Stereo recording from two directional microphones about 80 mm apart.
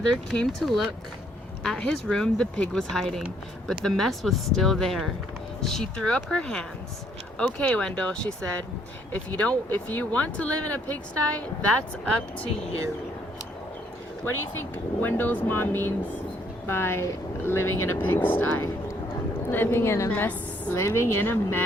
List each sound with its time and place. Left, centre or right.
0.1 s speech: centre
14.6 s speech: left
20.1 s a woman's voice: left
20.7 s speech: left